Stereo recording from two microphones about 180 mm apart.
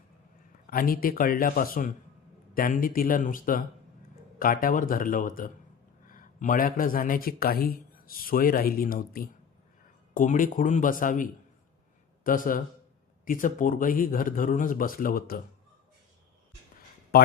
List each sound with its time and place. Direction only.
0.7 s speech: 55° left (ahead or behind)
17.1 s speech: 55° left (ahead or behind)